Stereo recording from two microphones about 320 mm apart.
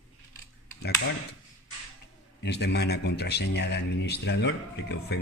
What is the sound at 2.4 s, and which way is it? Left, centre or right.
Speech, left.